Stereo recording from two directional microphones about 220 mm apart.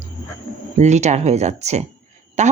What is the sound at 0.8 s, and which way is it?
A woman's voice, 30° right (ahead or behind).